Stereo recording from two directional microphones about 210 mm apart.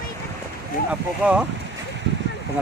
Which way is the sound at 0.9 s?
5° right (ahead or behind).